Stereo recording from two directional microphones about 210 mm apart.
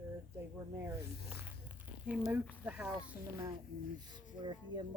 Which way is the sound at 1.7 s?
10° right (ahead or behind).